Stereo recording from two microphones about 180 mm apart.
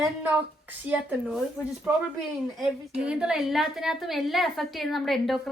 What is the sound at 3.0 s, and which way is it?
A woman's voice, 5° right (ahead or behind).